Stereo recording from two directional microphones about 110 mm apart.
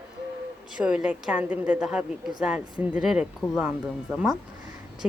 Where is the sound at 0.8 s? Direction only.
10° right (ahead or behind).